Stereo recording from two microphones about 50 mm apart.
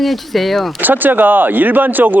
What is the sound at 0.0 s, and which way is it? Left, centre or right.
Speech, centre.